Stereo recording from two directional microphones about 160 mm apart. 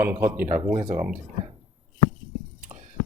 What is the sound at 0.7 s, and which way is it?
Speech, 25° right (ahead or behind).